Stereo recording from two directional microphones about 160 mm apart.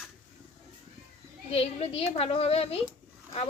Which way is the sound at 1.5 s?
40° left (ahead or behind).